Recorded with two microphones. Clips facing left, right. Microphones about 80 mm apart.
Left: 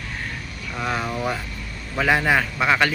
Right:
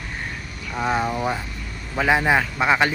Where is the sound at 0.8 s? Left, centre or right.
Centre.